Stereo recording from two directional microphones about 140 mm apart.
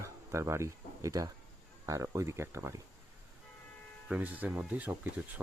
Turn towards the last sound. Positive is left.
turn(degrees=-10)  # may be behind; listen again after turning